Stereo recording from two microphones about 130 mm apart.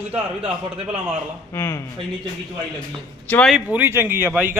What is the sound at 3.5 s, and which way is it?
Speech, 10° right (ahead or behind).